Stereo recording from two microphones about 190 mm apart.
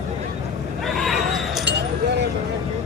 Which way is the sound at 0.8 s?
Centre (ahead or behind).